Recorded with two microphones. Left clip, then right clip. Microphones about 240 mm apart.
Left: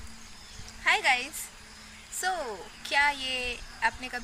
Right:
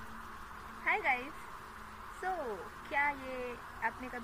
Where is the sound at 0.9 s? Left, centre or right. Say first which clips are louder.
Left 8 dB; left.